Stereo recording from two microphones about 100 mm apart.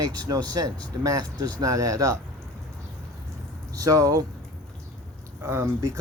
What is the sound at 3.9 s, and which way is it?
Speech, 35° right (ahead or behind).